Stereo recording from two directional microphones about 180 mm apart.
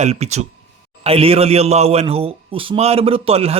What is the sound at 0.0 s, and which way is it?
A man's voice, 35° right (ahead or behind).